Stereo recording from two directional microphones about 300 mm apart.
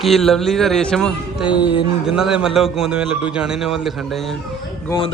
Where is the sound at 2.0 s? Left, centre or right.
Centre.